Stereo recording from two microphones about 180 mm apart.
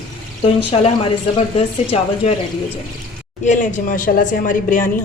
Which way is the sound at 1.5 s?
35° left (ahead or behind).